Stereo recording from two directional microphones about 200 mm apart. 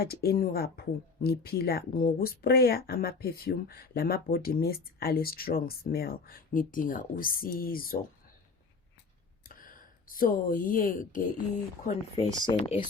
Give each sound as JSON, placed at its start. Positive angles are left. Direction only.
{"t": 0.0, "sound": "speech", "side_deg": 50}
{"t": 10.1, "sound": "speech", "side_deg": 45}
{"t": 11.9, "sound": "speech", "side_deg": 25}